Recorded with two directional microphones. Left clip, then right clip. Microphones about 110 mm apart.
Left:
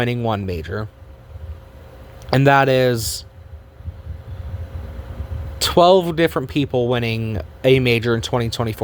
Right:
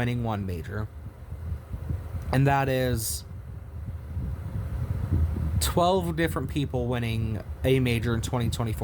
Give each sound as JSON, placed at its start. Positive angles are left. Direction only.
{"t": 0.3, "sound": "speech", "side_deg": 40}
{"t": 2.1, "sound": "speech", "side_deg": 50}
{"t": 5.5, "sound": "speech", "side_deg": 40}